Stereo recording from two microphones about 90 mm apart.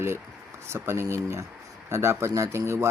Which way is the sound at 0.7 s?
30° right (ahead or behind).